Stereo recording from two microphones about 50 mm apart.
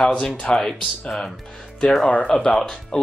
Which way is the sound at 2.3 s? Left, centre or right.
Left.